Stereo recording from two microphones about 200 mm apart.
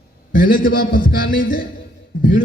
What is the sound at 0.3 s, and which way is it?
A man's voice, 45° left (ahead or behind).